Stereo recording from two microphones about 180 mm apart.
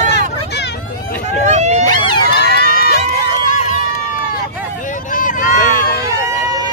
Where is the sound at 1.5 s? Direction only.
40° right (ahead or behind).